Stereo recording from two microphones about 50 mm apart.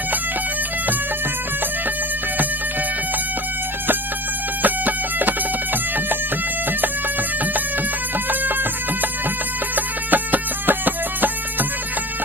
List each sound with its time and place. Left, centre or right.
4.6 s music: right
9.7 s music: right